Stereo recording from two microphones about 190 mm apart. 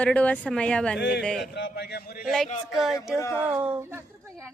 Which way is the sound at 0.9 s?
60° left (ahead or behind).